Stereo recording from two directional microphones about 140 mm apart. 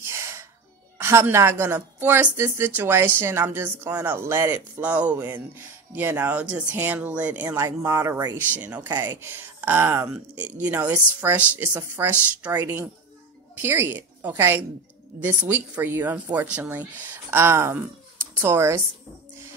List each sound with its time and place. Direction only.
0.0 s music: 20° right (ahead or behind)
1.0 s speech: 15° right (ahead or behind)
8.5 s speech: 10° right (ahead or behind)